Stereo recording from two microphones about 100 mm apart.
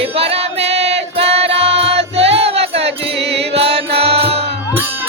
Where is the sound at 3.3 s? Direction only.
75° right (ahead or behind).